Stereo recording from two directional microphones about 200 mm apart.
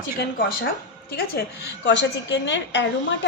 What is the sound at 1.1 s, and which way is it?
A woman's voice, 55° left (ahead or behind).